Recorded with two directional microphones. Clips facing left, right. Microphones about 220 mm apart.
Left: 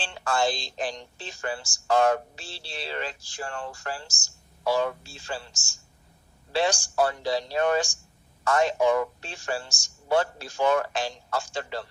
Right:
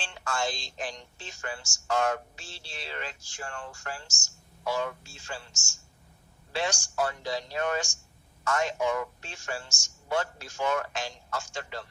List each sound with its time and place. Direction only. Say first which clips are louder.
0.0 s a woman's voice: left 6 dB; 35° left (ahead or behind)